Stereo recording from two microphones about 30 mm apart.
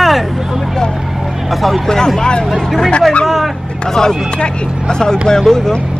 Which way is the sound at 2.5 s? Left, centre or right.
Centre.